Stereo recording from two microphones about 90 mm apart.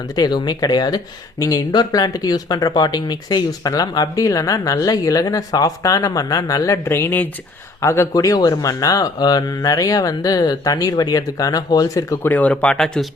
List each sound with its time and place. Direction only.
0.2 s speech: 50° left (ahead or behind)
1.4 s speech: 40° left (ahead or behind)
6.8 s speech: 25° left (ahead or behind)
12.2 s speech: 20° left (ahead or behind)